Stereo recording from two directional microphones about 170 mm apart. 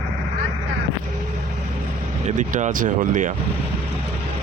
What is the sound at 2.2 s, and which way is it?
Speech, 45° right (ahead or behind).